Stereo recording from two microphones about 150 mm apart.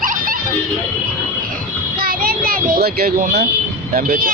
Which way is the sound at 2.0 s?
75° right (ahead or behind).